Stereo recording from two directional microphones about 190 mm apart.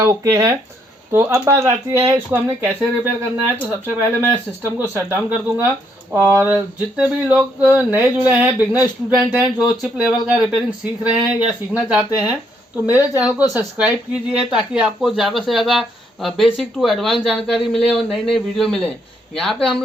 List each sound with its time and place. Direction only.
0.0 s speech: 15° right (ahead or behind); by 19.8 s centre (ahead or behind)